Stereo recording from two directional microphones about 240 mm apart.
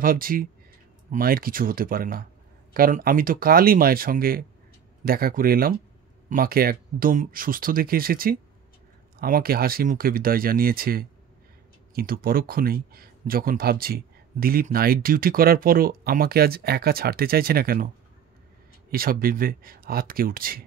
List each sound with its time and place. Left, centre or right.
0.0 s speech: right
18.9 s speech: right